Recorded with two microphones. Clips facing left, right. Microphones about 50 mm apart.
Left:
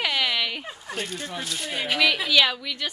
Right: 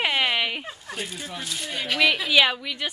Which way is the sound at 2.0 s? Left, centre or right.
Centre.